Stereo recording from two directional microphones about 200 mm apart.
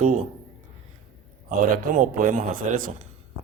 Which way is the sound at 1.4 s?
40° right (ahead or behind).